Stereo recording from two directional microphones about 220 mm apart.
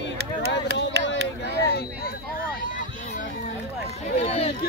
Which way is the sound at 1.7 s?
45° left (ahead or behind).